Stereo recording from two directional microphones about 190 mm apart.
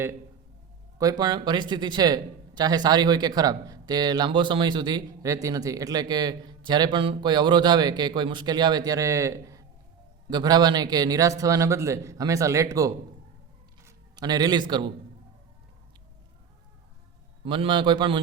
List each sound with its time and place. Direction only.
1.2 s a man's voice: 25° right (ahead or behind)
17.4 s speech: 25° right (ahead or behind)